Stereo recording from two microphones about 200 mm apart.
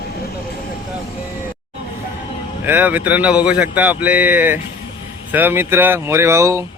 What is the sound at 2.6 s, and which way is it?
Speech, 10° right (ahead or behind).